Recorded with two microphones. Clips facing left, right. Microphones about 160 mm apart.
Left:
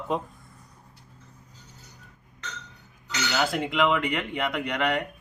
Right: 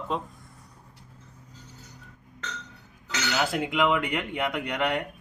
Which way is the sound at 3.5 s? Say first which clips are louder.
Even; 15° right (ahead or behind).